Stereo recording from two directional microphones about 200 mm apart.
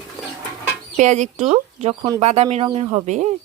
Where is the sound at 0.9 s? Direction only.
35° right (ahead or behind).